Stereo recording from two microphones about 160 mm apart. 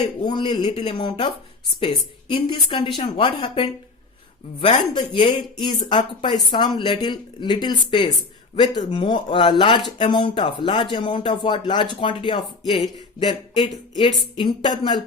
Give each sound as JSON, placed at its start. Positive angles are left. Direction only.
{"t": 0.2, "sound": "a woman's voice", "side_deg": 30}